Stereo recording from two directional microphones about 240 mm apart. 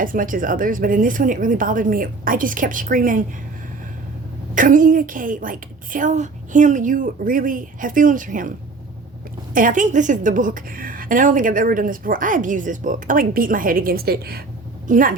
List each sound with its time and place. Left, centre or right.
0.0 s a woman's voice: right
4.5 s a woman's voice: right
9.6 s a woman's voice: right